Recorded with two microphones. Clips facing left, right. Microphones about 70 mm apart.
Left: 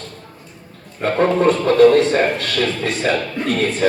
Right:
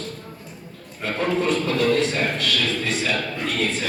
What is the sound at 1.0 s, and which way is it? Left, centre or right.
A man's voice, left.